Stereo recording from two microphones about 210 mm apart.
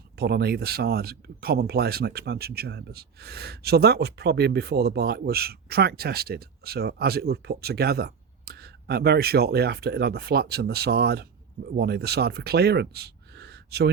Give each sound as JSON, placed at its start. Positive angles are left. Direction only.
{"t": 0.2, "sound": "speech", "side_deg": -50}